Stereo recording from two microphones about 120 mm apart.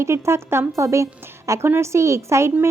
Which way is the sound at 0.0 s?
20° right (ahead or behind).